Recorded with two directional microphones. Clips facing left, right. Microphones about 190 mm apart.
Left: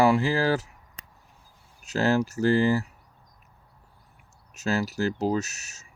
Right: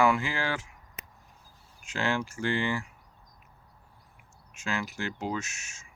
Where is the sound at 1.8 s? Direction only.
40° left (ahead or behind).